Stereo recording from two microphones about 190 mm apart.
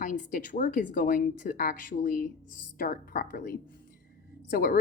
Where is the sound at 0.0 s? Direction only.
45° left (ahead or behind).